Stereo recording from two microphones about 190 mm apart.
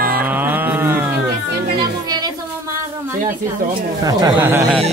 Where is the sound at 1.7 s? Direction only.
20° right (ahead or behind).